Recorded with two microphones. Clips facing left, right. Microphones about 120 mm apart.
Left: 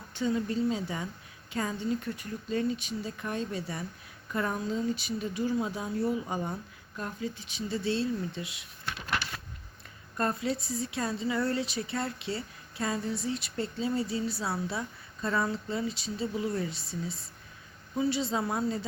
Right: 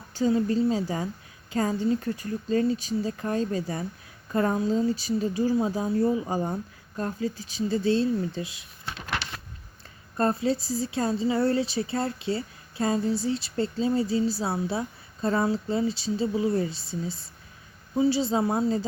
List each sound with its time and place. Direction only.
0.1 s a woman's voice: 35° right (ahead or behind)
10.2 s a woman's voice: 35° right (ahead or behind)
16.3 s a woman's voice: 20° right (ahead or behind)
16.6 s a woman's voice: 35° right (ahead or behind)